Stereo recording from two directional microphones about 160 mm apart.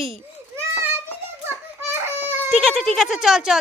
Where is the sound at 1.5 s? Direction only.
15° right (ahead or behind).